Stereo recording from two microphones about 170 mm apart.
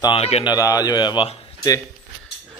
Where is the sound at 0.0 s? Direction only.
35° left (ahead or behind).